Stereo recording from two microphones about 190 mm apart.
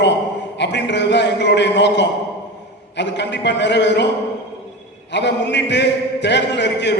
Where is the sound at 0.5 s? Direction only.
65° left (ahead or behind).